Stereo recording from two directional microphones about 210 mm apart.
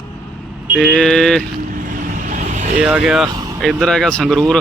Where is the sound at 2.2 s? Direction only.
35° right (ahead or behind).